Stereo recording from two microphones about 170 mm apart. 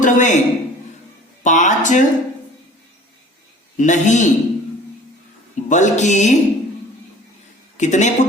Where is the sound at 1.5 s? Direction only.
45° left (ahead or behind).